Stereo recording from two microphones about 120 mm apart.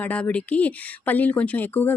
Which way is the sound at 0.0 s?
10° left (ahead or behind).